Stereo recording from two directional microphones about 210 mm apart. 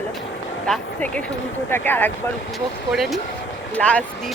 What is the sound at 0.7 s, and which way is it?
Speech, 5° left (ahead or behind).